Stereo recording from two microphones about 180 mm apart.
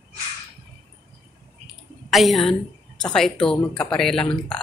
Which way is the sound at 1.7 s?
Centre (ahead or behind).